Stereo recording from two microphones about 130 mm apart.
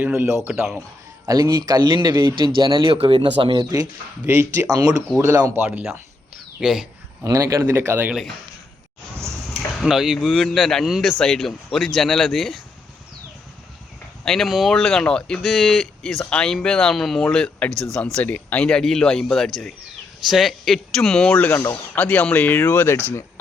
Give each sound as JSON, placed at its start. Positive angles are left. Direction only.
{"t": 0.0, "sound": "speech", "side_deg": -15}
{"t": 4.3, "sound": "speech", "side_deg": -15}
{"t": 5.6, "sound": "speech", "side_deg": -10}
{"t": 7.3, "sound": "speech", "side_deg": -25}
{"t": 9.5, "sound": "speech", "side_deg": 0}
{"t": 14.3, "sound": "speech", "side_deg": 0}